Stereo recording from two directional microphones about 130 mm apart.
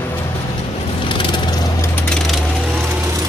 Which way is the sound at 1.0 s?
35° left (ahead or behind).